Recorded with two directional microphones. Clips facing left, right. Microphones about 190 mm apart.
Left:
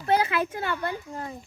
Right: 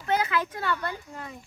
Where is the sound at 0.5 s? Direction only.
20° left (ahead or behind).